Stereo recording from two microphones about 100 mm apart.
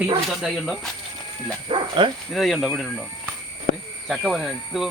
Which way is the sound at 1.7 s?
60° right (ahead or behind).